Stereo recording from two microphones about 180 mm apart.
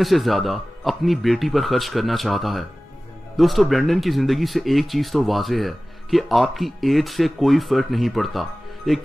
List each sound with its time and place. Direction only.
0.0 s speech: centre (ahead or behind)